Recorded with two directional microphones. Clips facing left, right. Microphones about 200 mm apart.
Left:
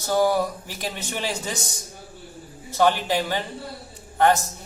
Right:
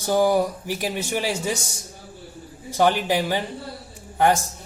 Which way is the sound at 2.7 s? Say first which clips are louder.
Right 1 dB; 15° right (ahead or behind).